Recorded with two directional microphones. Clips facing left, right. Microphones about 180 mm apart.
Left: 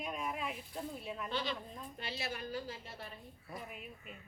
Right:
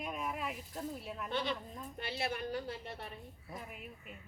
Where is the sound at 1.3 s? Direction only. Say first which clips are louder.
Right 4 dB; 55° right (ahead or behind).